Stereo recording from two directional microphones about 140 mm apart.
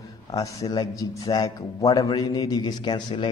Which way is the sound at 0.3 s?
25° left (ahead or behind).